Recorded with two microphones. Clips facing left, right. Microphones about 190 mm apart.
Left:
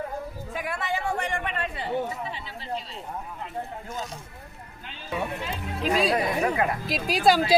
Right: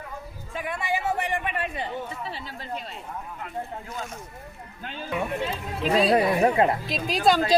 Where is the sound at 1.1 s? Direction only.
15° right (ahead or behind).